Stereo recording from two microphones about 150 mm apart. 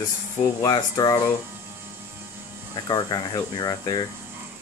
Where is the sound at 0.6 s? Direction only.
25° left (ahead or behind).